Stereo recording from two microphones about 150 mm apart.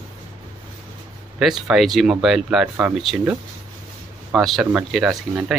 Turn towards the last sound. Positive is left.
turn(degrees=-5)  # may be behind; listen again after turning